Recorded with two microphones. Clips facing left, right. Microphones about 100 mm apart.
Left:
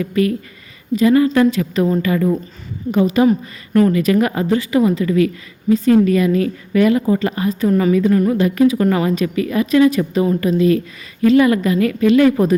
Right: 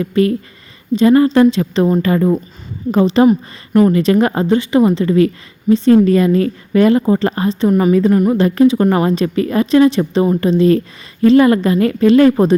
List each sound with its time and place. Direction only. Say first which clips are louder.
0.0 s speech: right 3 dB; 30° right (ahead or behind)
1.3 s speech: right 3 dB; 25° right (ahead or behind)
4.4 s speech: right 3 dB; 25° right (ahead or behind)
7.7 s a woman's voice: right 2 dB; 20° right (ahead or behind)
7.9 s speech: right 2 dB; 35° right (ahead or behind)